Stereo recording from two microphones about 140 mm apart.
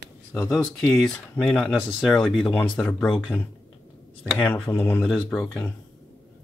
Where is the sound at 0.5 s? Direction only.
5° left (ahead or behind).